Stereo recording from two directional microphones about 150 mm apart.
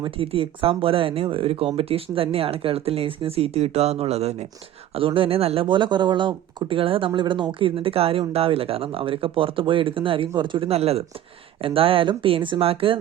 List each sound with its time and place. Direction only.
0.0 s speech: 35° right (ahead or behind)